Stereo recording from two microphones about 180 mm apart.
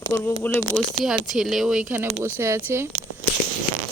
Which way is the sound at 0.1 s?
10° left (ahead or behind).